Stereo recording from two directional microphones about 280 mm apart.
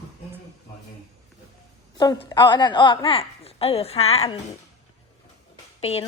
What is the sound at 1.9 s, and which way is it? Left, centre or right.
A woman's voice, centre.